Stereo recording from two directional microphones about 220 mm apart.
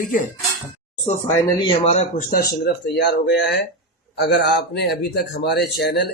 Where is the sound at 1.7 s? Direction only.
25° left (ahead or behind).